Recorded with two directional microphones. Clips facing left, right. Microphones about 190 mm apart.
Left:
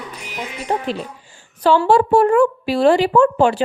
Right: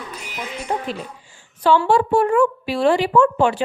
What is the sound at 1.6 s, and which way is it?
A woman's voice, 35° left (ahead or behind).